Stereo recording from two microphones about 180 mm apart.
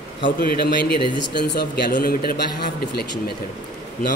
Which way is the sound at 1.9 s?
55° left (ahead or behind).